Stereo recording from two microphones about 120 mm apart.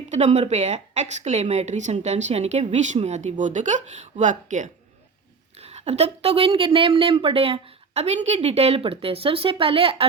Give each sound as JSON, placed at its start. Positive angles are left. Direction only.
{"t": 0.1, "sound": "a woman's voice", "side_deg": -75}
{"t": 5.5, "sound": "speech", "side_deg": -65}